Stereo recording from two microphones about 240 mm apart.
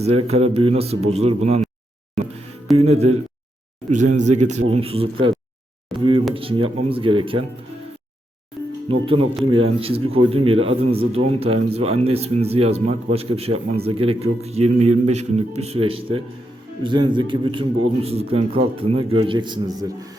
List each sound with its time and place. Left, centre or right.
0.0 s a man's voice: right
2.2 s speech: centre
2.7 s a man's voice: right
8.9 s a man's voice: right